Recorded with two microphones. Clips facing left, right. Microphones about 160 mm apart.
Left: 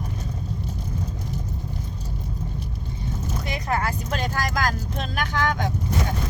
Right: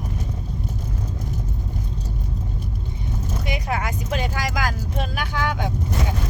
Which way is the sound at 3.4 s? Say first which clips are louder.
Left 1 dB; 10° right (ahead or behind).